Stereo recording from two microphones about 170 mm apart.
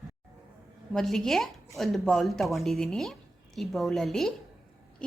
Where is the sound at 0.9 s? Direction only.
Centre (ahead or behind).